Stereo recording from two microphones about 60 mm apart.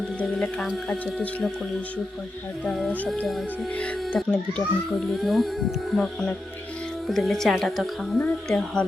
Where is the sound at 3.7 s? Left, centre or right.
Centre.